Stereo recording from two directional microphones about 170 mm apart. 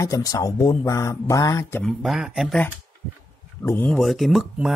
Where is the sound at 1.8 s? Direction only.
Centre (ahead or behind).